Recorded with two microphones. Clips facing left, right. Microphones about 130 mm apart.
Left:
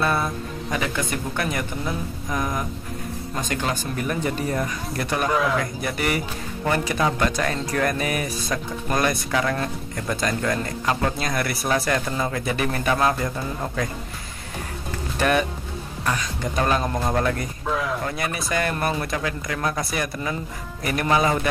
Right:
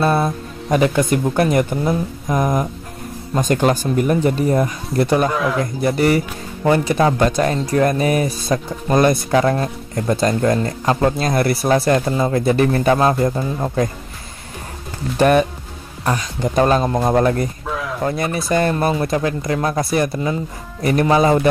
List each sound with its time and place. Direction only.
0.0 s speech: 35° right (ahead or behind)
4.0 s speech: 30° right (ahead or behind)
5.3 s speech: centre (ahead or behind)
5.6 s speech: 30° right (ahead or behind)
15.1 s speech: 35° right (ahead or behind)
17.6 s a sound: centre (ahead or behind)
18.0 s speech: 35° right (ahead or behind)